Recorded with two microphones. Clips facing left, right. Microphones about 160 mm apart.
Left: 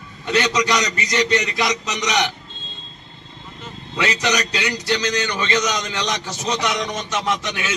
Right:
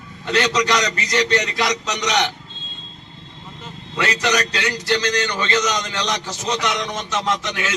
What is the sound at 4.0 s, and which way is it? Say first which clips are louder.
A man's voice: right 1 dB; 15° left (ahead or behind).